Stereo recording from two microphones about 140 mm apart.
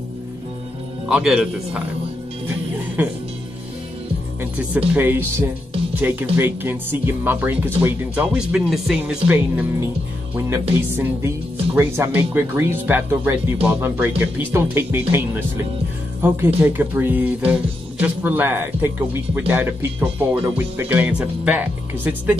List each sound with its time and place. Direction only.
1.0 s speech: 5° right (ahead or behind)
3.0 s speech: 15° right (ahead or behind)
4.4 s speech: 10° right (ahead or behind)